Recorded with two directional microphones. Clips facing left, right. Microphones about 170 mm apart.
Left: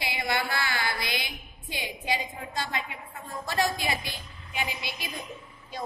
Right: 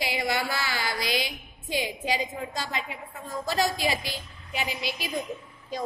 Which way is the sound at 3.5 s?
40° right (ahead or behind).